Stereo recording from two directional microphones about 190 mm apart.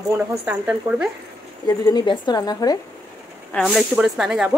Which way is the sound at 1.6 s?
20° left (ahead or behind).